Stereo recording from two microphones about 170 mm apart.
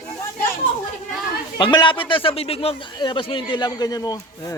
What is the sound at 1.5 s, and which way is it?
Speech, 30° left (ahead or behind).